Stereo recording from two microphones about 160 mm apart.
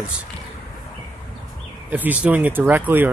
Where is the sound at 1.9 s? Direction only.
10° right (ahead or behind).